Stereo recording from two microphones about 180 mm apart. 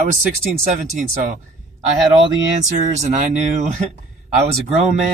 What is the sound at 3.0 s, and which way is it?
Speech, 40° right (ahead or behind).